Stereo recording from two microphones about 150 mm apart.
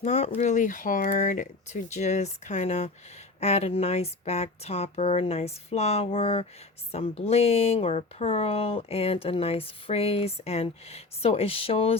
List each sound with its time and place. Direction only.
0.0 s speech: 45° left (ahead or behind)